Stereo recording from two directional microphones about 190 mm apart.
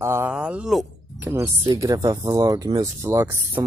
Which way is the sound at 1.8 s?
15° right (ahead or behind).